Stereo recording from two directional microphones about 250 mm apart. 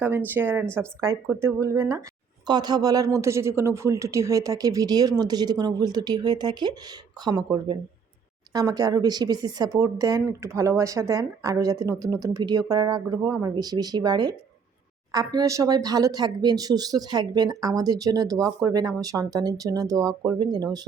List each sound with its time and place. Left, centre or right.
0.3 s speech: centre